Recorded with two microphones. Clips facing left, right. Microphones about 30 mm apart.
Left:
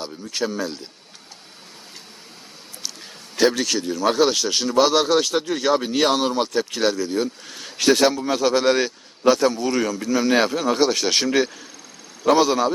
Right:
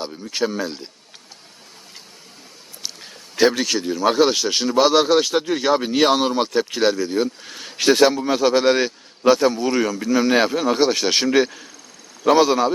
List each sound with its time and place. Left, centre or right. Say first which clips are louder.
0.0 s speech: right 3 dB; centre
2.8 s speech: right 1 dB; centre